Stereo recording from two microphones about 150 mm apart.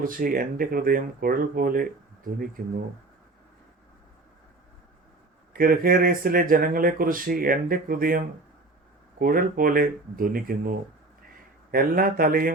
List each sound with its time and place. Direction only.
0.0 s speech: 65° right (ahead or behind)
5.5 s speech: 75° right (ahead or behind)
11.7 s speech: 70° right (ahead or behind)